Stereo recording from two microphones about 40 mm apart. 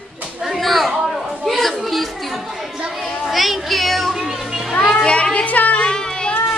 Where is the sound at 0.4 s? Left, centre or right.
Centre.